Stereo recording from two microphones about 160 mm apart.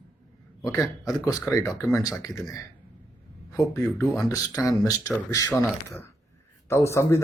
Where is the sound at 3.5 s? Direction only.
20° left (ahead or behind).